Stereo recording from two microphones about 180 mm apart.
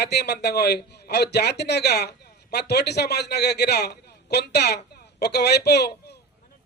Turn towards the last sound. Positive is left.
turn(degrees=65)  # may be behind; listen again after turning